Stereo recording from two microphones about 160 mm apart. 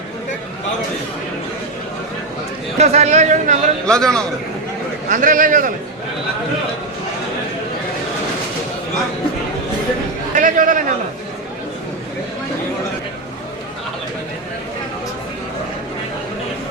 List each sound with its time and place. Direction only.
2.7 s speech: 40° right (ahead or behind)
3.8 s a man's voice: 5° left (ahead or behind)
5.0 s a man's voice: 55° right (ahead or behind)
10.3 s a sound: 55° right (ahead or behind)